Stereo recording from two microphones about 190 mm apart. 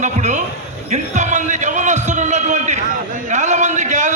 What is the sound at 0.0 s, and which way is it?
Speech, 40° right (ahead or behind).